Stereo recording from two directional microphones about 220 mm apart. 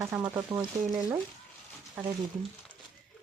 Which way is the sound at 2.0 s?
5° right (ahead or behind).